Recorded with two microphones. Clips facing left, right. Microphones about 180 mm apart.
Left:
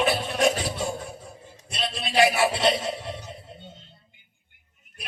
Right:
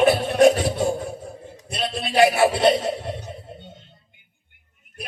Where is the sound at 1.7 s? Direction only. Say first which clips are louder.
Right 3 dB; 45° right (ahead or behind).